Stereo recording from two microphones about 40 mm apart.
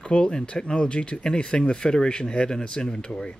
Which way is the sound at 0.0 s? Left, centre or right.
Left.